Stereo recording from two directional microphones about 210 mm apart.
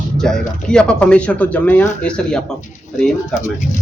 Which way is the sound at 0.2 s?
5° left (ahead or behind).